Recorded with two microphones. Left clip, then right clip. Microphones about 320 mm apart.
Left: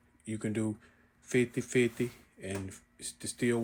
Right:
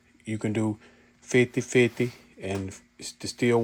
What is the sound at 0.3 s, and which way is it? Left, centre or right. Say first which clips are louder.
Speech: right 6 dB; centre.